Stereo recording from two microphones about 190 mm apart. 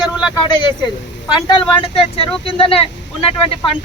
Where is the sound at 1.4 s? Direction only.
25° left (ahead or behind).